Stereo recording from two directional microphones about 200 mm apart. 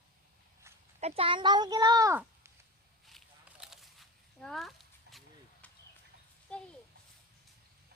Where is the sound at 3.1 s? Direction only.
Centre (ahead or behind).